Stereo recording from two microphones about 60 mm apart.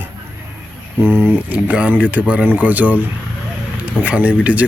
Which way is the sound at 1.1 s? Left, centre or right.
Left.